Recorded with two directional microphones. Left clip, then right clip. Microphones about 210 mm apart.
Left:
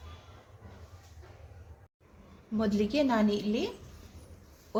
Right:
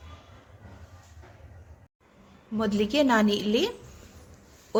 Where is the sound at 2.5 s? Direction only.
10° right (ahead or behind); by 3.7 s 25° right (ahead or behind).